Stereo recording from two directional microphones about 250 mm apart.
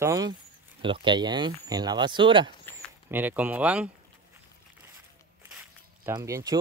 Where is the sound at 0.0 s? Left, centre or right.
Centre.